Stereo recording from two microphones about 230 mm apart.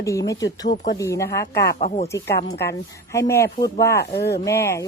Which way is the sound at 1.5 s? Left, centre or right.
Left.